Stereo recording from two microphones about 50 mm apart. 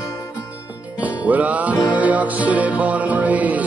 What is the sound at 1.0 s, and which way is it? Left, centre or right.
Music, right.